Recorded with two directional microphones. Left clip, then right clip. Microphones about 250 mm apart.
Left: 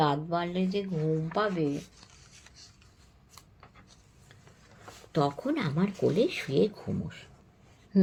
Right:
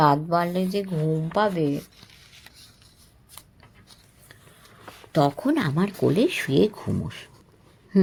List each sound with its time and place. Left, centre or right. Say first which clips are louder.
0.0 s speech: right 8 dB; right
5.1 s speech: right 7 dB; right